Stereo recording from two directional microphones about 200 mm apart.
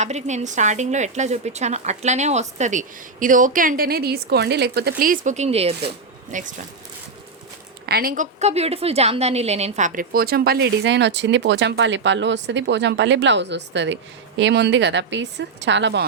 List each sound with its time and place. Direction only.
0.0 s a woman's voice: 35° right (ahead or behind)
7.9 s a woman's voice: 50° right (ahead or behind)